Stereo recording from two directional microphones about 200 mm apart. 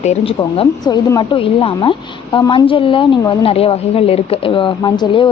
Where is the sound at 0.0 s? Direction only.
35° left (ahead or behind).